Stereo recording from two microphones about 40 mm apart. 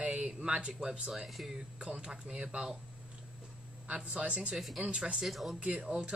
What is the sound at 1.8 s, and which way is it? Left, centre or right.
Speech, right.